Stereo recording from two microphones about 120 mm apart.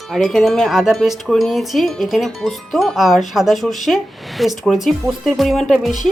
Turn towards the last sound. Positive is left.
turn(degrees=0)  # may be behind; listen again after turning